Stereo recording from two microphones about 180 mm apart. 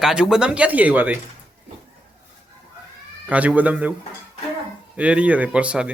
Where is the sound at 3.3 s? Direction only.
10° right (ahead or behind).